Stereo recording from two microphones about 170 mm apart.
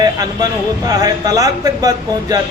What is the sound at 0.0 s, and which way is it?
Speech, 20° right (ahead or behind).